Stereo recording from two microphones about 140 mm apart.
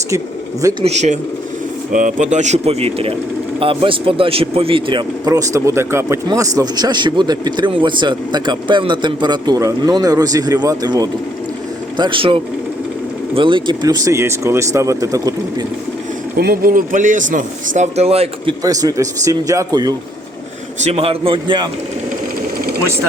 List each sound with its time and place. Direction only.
0.6 s speech: 30° right (ahead or behind)
0.9 s speech: 55° right (ahead or behind)
1.9 s speech: 70° right (ahead or behind); by 5.3 s 35° right (ahead or behind)
5.3 s a man's voice: 25° right (ahead or behind)
16.5 s speech: 85° right; by 18.5 s 45° right (ahead or behind)
18.6 s a man's voice: 25° right (ahead or behind)
20.8 s speech: 45° right (ahead or behind)